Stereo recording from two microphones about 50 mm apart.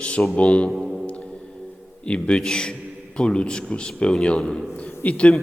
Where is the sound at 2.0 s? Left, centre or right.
Left.